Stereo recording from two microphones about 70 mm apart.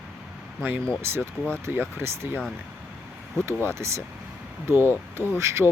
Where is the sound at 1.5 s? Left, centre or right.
Right.